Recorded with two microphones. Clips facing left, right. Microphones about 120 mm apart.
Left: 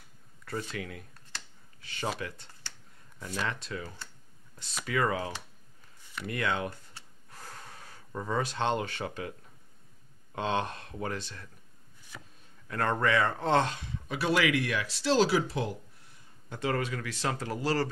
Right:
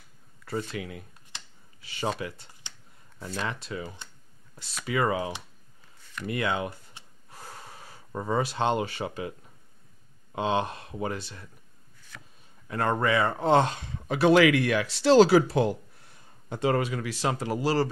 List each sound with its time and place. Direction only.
0.7 s a sound: 10° right (ahead or behind)
3.4 s speech: 5° right (ahead or behind)
7.2 s gasp: 5° right (ahead or behind)
8.1 s speech: 20° right (ahead or behind)
8.4 s speech: 10° right (ahead or behind)
10.3 s speech: 10° right (ahead or behind)
12.6 s speech: 10° right (ahead or behind)
13.7 s speech: 60° right (ahead or behind)
16.5 s speech: 20° right (ahead or behind)